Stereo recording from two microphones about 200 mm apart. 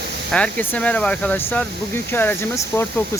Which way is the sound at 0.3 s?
5° left (ahead or behind).